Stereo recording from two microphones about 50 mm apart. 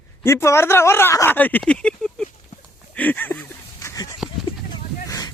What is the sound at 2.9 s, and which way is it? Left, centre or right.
Speech, left.